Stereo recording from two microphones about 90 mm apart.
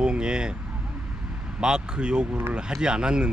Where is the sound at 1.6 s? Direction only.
10° right (ahead or behind).